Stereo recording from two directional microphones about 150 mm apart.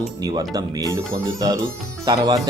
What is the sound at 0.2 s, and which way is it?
Speech, 25° right (ahead or behind).